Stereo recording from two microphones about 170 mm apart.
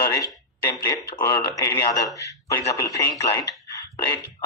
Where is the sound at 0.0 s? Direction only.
20° left (ahead or behind).